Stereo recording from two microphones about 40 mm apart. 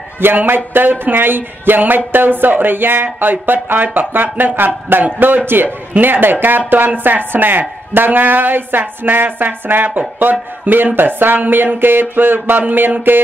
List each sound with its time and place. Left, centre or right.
0.2 s speech: right